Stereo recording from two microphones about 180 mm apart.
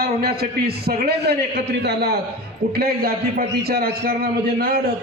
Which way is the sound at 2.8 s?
55° right (ahead or behind).